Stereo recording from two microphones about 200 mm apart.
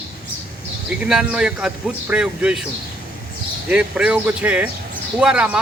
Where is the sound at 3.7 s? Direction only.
5° right (ahead or behind).